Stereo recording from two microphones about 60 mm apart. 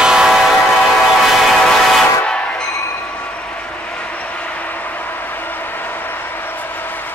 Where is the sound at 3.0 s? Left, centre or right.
Centre.